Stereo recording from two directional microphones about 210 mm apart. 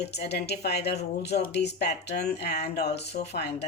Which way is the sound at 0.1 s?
50° left (ahead or behind).